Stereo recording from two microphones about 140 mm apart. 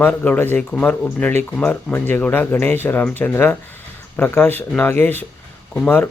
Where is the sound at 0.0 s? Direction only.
10° left (ahead or behind).